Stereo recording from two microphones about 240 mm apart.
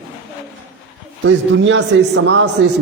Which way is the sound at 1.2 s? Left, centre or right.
Right.